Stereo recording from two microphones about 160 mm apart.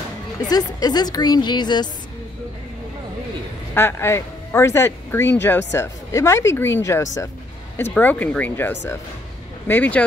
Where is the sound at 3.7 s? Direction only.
15° left (ahead or behind).